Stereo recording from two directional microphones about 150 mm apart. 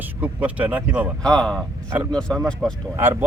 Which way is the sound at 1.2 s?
5° left (ahead or behind).